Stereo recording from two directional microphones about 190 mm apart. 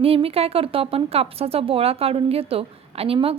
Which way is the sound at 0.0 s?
30° right (ahead or behind).